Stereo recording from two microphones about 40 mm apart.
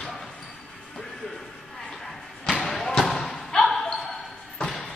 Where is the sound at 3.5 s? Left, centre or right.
Centre.